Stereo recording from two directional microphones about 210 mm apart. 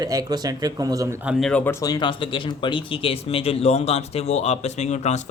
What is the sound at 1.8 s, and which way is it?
Speech, 20° left (ahead or behind).